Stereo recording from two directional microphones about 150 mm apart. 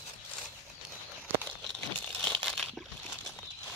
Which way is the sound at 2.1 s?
10° left (ahead or behind).